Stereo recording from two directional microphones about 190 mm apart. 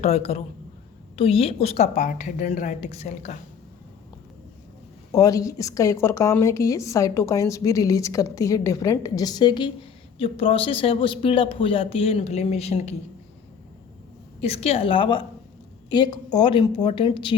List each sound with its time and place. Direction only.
0.0 s a woman's voice: 35° left (ahead or behind)
5.1 s a woman's voice: 15° left (ahead or behind); by 12.8 s 35° left (ahead or behind)
14.4 s speech: 35° left (ahead or behind)